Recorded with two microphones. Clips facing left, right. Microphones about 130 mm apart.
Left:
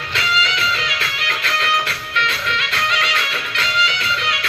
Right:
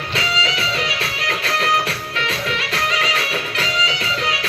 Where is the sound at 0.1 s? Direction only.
35° right (ahead or behind).